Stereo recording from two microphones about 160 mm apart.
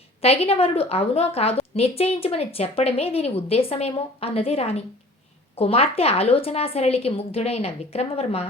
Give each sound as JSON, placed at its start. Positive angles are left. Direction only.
{"t": 0.2, "sound": "a woman's voice", "side_deg": 35}